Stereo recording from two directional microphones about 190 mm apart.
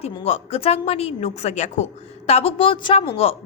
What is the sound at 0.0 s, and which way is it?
A woman's voice, 30° left (ahead or behind).